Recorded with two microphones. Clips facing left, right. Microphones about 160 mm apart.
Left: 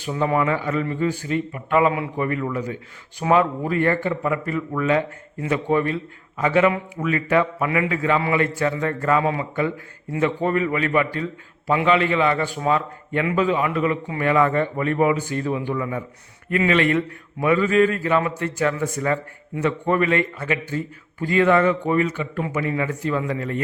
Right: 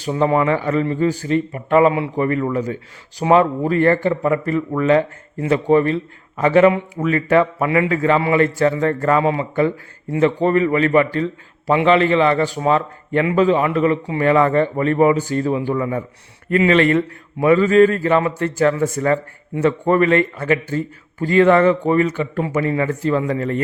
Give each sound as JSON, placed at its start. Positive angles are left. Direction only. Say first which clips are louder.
{"t": 0.0, "sound": "a man's voice", "louder": "right 4 dB", "side_deg": -30}
{"t": 9.2, "sound": "a man's voice", "louder": "right 5 dB", "side_deg": -25}
{"t": 11.7, "sound": "a man's voice", "louder": "right 5 dB", "side_deg": -30}